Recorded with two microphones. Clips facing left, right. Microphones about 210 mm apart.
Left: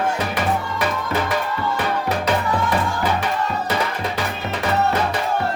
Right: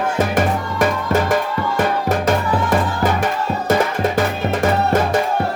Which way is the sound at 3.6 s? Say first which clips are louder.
Right 6 dB; 45° right (ahead or behind).